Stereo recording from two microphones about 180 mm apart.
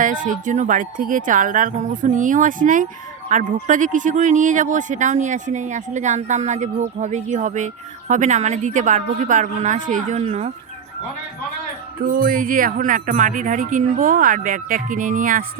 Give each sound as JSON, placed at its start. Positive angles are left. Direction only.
{"t": 0.0, "sound": "speech", "side_deg": -45}
{"t": 12.1, "sound": "speech", "side_deg": -50}